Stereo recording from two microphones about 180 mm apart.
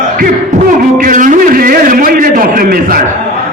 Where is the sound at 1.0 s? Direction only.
45° right (ahead or behind).